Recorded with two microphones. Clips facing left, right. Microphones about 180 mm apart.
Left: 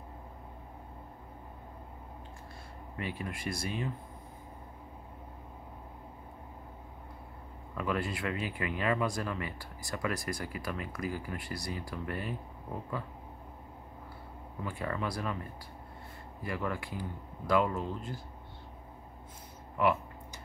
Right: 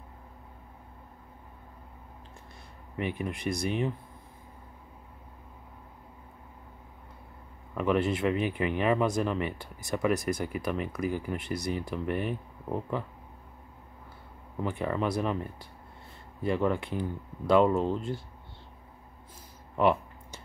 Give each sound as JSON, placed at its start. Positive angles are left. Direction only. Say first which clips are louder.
{"t": 3.0, "sound": "speech", "louder": "right 6 dB", "side_deg": -20}
{"t": 7.7, "sound": "speech", "louder": "right 7 dB", "side_deg": -20}
{"t": 14.6, "sound": "speech", "louder": "right 6 dB", "side_deg": -20}
{"t": 16.4, "sound": "speech", "louder": "right 8 dB", "side_deg": -25}
{"t": 19.8, "sound": "a sound", "louder": "right 4 dB", "side_deg": -25}